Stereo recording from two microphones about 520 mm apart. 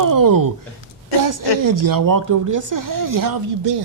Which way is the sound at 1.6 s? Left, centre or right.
Right.